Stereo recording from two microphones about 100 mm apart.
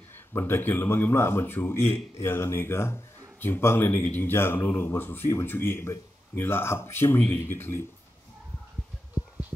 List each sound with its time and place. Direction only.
0.3 s speech: 20° left (ahead or behind)